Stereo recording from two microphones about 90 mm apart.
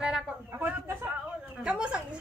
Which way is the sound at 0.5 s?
25° right (ahead or behind).